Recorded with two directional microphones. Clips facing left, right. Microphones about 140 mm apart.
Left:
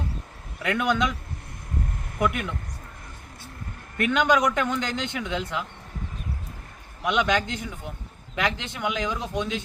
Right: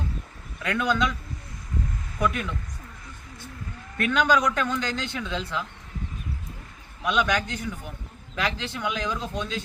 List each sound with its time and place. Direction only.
0.6 s a man's voice: 20° left (ahead or behind)
2.1 s speech: 20° left (ahead or behind)
3.9 s a man's voice: 20° left (ahead or behind)
7.0 s a man's voice: 20° left (ahead or behind)